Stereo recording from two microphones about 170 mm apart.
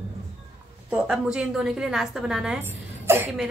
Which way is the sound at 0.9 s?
5° right (ahead or behind).